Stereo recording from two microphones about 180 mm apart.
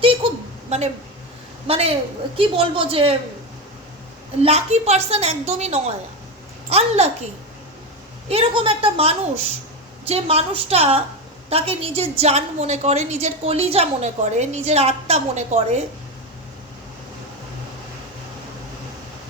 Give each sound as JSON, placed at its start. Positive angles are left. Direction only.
{"t": 0.7, "sound": "a woman's voice", "side_deg": -35}
{"t": 4.4, "sound": "a woman's voice", "side_deg": -35}
{"t": 8.3, "sound": "a woman's voice", "side_deg": -30}